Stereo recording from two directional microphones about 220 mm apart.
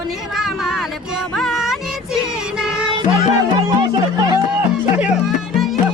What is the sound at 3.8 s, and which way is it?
Music, 20° right (ahead or behind).